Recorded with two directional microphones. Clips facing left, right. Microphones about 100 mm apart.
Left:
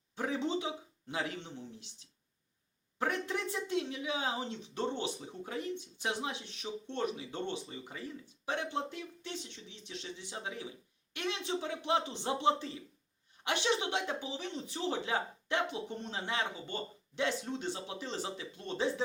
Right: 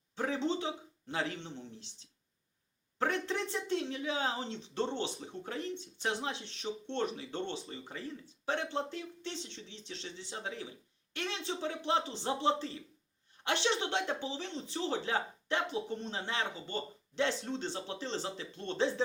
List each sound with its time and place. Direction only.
0.2 s speech: 15° left (ahead or behind)
3.5 s speech: 10° left (ahead or behind)